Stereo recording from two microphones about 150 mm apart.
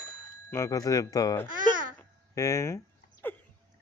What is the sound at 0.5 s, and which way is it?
Speech, 20° left (ahead or behind).